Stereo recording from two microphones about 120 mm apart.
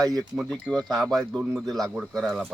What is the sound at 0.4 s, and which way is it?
Speech, 5° left (ahead or behind).